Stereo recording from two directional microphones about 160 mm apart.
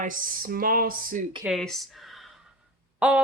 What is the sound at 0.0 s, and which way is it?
Speech, 60° right (ahead or behind).